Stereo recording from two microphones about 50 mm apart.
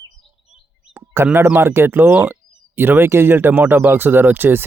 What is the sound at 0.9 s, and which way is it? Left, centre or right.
Bird, right.